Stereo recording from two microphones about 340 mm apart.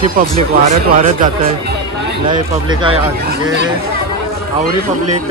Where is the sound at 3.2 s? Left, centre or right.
Right.